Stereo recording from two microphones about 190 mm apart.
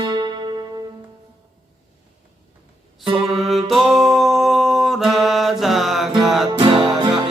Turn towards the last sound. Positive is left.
turn(degrees=-20)  # may be behind; listen again after turning